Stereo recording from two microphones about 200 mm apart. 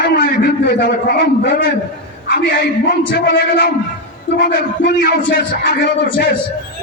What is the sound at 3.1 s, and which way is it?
Speech, 60° left (ahead or behind).